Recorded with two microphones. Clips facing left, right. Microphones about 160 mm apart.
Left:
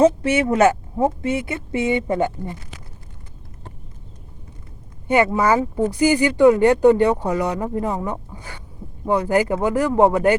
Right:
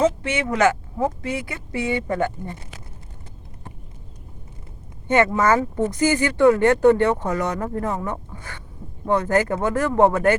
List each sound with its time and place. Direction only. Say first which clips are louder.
0.2 s speech: left 4 dB; 30° left (ahead or behind)
5.0 s speech: left 1 dB; 15° left (ahead or behind)